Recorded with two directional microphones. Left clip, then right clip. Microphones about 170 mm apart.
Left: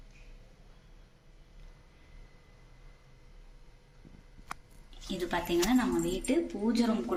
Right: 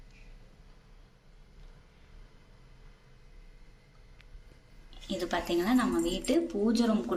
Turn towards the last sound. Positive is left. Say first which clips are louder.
# right 2 dB
turn(degrees=-15)  # may be behind; listen again after turning